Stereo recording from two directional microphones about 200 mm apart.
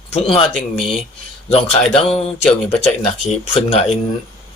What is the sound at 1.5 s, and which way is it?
Speech, 30° left (ahead or behind).